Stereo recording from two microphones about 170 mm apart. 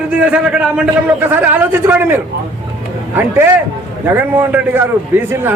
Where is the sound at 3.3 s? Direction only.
15° right (ahead or behind).